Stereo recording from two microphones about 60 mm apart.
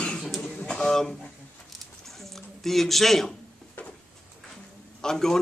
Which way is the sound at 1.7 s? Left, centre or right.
Centre.